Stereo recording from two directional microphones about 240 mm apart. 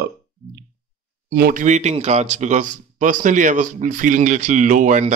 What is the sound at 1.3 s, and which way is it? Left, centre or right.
Speech, right.